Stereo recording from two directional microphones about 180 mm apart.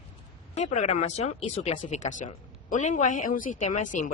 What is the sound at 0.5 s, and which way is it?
Speech, 40° left (ahead or behind).